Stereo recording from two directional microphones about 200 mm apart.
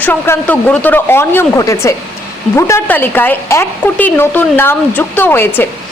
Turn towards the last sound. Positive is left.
turn(degrees=10)  # may be behind; listen again after turning